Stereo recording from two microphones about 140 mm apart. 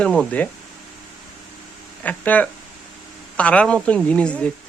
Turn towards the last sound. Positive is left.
turn(degrees=10)  # may be behind; listen again after turning